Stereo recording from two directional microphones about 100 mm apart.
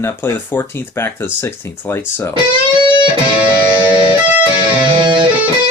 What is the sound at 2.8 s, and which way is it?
Music, 50° right (ahead or behind).